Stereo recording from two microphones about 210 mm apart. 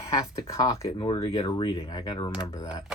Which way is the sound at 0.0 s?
15° left (ahead or behind).